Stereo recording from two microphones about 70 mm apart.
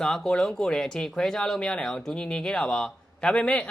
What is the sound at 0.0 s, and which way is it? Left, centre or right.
Speech, centre.